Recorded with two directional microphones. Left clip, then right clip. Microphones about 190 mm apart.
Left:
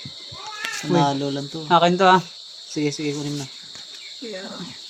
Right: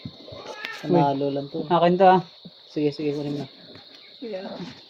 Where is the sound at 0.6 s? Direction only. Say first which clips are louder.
Left 6 dB; 20° left (ahead or behind).